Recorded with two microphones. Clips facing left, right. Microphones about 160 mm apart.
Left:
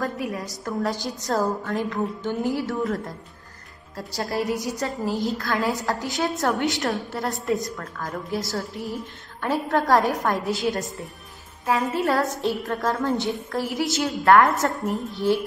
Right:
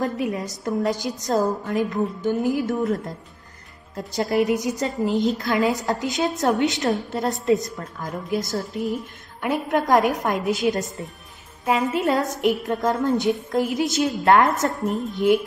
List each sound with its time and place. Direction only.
0.0 s a woman's voice: 20° right (ahead or behind)